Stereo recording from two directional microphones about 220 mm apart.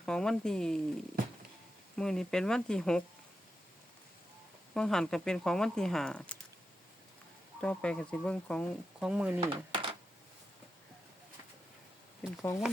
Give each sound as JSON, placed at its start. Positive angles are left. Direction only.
{"t": 0.0, "sound": "speech", "side_deg": 5}
{"t": 2.0, "sound": "speech", "side_deg": 0}
{"t": 4.7, "sound": "speech", "side_deg": 5}
{"t": 7.6, "sound": "speech", "side_deg": 5}
{"t": 9.4, "sound": "a sound", "side_deg": -25}
{"t": 12.4, "sound": "speech", "side_deg": 10}